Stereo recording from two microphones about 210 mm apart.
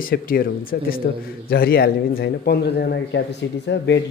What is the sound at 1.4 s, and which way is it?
A man's voice, 45° left (ahead or behind).